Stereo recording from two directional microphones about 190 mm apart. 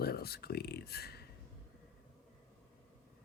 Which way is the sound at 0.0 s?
55° left (ahead or behind).